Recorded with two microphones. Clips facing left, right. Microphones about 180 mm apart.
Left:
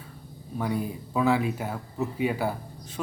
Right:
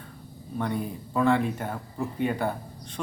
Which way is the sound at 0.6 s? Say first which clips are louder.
Left 1 dB; 5° left (ahead or behind).